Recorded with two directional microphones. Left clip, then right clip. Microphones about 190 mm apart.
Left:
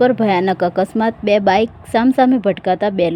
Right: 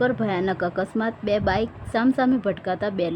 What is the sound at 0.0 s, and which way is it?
A woman's voice, 25° left (ahead or behind).